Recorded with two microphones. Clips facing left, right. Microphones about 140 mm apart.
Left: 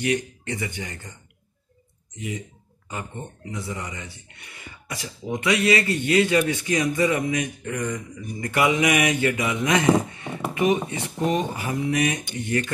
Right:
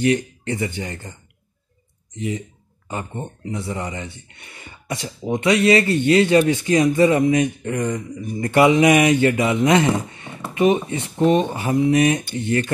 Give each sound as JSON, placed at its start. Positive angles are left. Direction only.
{"t": 0.0, "sound": "speech", "side_deg": -35}
{"t": 2.1, "sound": "speech", "side_deg": -30}
{"t": 10.5, "sound": "a sound", "side_deg": -25}
{"t": 10.9, "sound": "speech", "side_deg": -30}